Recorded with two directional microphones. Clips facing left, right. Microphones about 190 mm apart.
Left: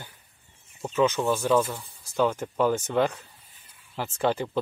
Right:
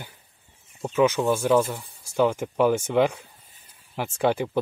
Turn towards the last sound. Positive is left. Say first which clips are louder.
# right 3 dB
turn(degrees=-10)  # may be behind; listen again after turning